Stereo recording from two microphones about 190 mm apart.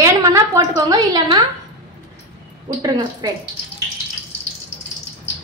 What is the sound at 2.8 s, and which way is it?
Speech, 20° right (ahead or behind).